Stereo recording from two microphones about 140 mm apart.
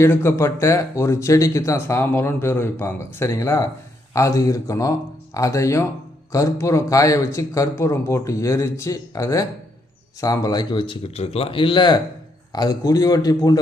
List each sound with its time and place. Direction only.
0.0 s speech: 20° left (ahead or behind)